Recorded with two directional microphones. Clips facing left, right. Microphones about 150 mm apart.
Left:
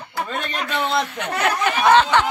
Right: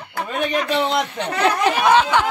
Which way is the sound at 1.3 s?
30° right (ahead or behind).